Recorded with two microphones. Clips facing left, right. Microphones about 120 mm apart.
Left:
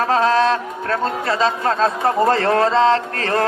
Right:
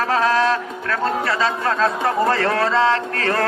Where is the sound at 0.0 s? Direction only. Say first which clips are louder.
Left 2 dB; 25° left (ahead or behind).